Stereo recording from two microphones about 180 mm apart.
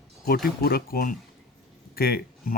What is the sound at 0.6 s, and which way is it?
Speech, 55° left (ahead or behind).